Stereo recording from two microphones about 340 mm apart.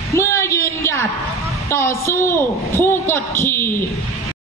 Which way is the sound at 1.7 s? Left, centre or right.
Centre.